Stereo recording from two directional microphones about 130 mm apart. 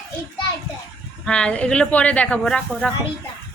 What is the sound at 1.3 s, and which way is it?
Speech, 10° left (ahead or behind).